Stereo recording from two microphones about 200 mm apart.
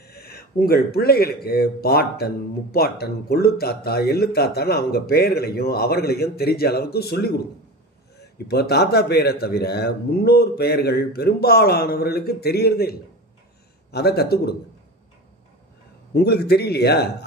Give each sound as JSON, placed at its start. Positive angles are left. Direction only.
{"t": 0.0, "sound": "a man's voice", "side_deg": 50}
{"t": 16.1, "sound": "a man's voice", "side_deg": 55}